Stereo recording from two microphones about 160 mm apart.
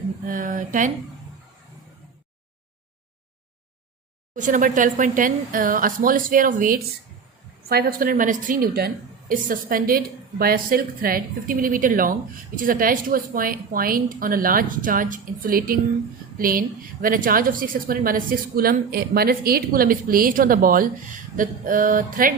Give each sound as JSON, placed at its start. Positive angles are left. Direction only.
{"t": 0.3, "sound": "speech", "side_deg": -55}
{"t": 4.4, "sound": "a woman's voice", "side_deg": -55}
{"t": 7.7, "sound": "a woman's voice", "side_deg": -70}